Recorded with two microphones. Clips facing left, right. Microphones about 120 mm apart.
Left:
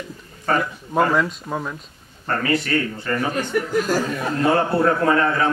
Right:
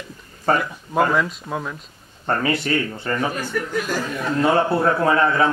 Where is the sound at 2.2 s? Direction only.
25° right (ahead or behind).